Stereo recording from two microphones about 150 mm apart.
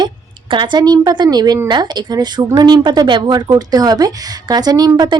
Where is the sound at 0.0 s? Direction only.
30° right (ahead or behind).